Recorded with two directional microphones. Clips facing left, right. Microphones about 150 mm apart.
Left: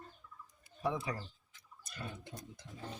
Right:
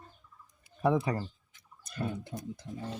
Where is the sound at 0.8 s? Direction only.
55° right (ahead or behind).